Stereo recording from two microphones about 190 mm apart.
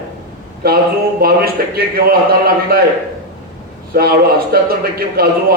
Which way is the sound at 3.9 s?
50° right (ahead or behind).